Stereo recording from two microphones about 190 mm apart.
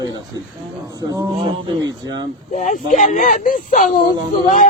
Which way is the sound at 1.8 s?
20° right (ahead or behind).